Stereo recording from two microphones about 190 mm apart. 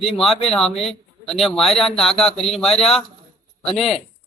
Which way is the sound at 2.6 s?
30° left (ahead or behind).